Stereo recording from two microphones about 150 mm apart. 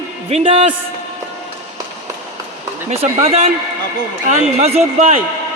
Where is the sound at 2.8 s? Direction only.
45° right (ahead or behind).